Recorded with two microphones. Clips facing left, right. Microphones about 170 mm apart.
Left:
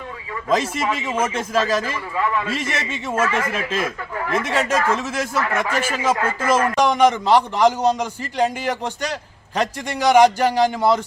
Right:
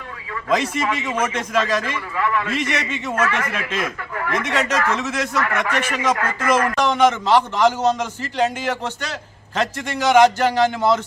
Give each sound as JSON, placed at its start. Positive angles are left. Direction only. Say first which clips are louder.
{"t": 0.5, "sound": "a man's voice", "louder": "even", "side_deg": 30}
{"t": 6.7, "sound": "a man's voice", "louder": "left 1 dB", "side_deg": 10}